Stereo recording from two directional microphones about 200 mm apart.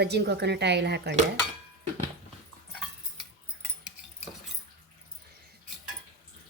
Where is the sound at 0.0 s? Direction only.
55° right (ahead or behind).